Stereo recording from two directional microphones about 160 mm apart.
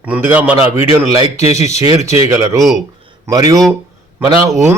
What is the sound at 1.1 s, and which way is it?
A man's voice, 25° right (ahead or behind).